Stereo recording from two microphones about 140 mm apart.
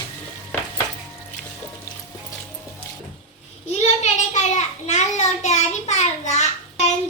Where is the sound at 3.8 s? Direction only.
55° left (ahead or behind).